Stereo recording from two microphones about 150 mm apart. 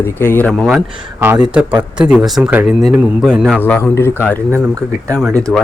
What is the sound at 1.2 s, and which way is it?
A man's voice, 10° right (ahead or behind).